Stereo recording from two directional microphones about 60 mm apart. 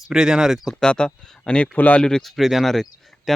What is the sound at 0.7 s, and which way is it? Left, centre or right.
Speech, centre.